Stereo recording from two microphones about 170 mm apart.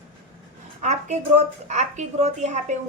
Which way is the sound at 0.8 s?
45° right (ahead or behind).